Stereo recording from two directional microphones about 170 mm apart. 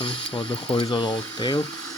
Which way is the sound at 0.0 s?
30° left (ahead or behind).